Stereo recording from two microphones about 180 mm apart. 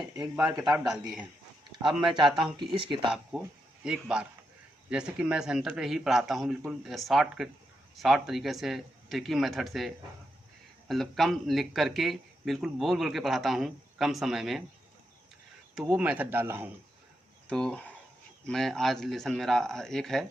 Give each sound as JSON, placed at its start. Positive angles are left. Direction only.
{"t": 0.6, "sound": "a man's voice", "side_deg": -5}
{"t": 2.1, "sound": "speech", "side_deg": -25}
{"t": 3.8, "sound": "a man's voice", "side_deg": -5}
{"t": 15.7, "sound": "speech", "side_deg": -10}
{"t": 17.5, "sound": "a man's voice", "side_deg": 5}